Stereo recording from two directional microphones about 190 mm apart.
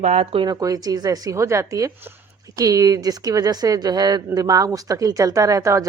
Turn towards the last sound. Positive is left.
turn(degrees=-15)  # may be behind; listen again after turning